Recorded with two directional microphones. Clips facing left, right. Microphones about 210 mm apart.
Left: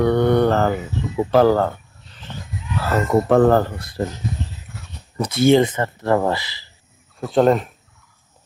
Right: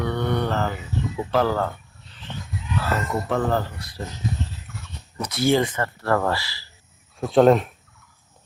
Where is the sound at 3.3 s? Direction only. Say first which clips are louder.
Left 9 dB; 50° left (ahead or behind).